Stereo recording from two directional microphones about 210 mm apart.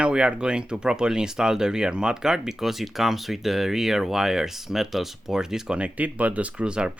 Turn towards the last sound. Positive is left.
turn(degrees=-5)  # may be behind; listen again after turning